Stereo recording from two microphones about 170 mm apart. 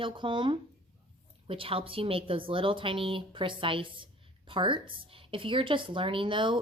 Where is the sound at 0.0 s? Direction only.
30° right (ahead or behind).